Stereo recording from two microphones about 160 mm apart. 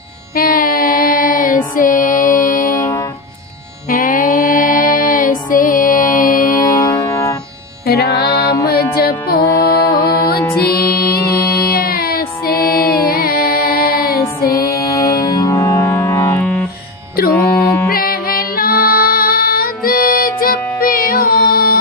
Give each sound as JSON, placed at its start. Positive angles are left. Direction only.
{"t": 0.3, "sound": "music", "side_deg": 65}
{"t": 2.7, "sound": "music", "side_deg": 25}
{"t": 3.8, "sound": "music", "side_deg": 60}
{"t": 6.7, "sound": "music", "side_deg": 20}
{"t": 7.9, "sound": "music", "side_deg": 75}
{"t": 14.2, "sound": "music", "side_deg": 20}
{"t": 17.8, "sound": "music", "side_deg": 65}